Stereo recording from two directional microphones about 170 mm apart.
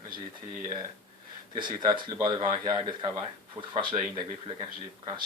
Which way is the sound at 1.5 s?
25° right (ahead or behind).